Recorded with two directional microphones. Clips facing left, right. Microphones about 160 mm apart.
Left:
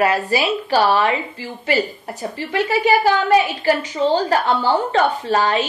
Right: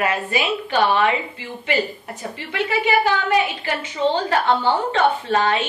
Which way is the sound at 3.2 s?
40° left (ahead or behind).